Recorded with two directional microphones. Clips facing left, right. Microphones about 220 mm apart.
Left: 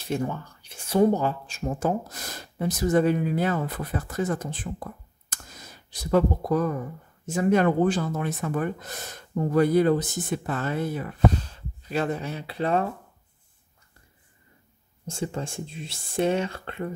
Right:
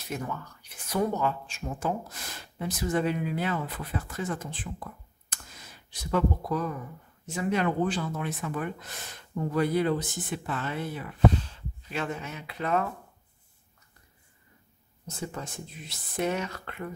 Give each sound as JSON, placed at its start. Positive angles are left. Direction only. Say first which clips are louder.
{"t": 0.1, "sound": "speech", "louder": "left 7 dB", "side_deg": 30}
{"t": 15.0, "sound": "speech", "louder": "left 6 dB", "side_deg": 30}